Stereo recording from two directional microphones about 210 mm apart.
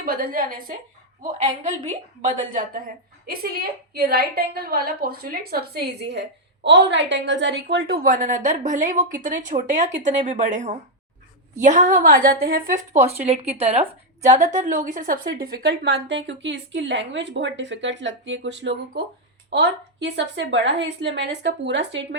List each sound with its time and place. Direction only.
0.0 s a woman's voice: 45° right (ahead or behind)